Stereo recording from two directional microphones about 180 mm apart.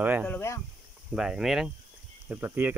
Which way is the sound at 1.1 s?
5° right (ahead or behind).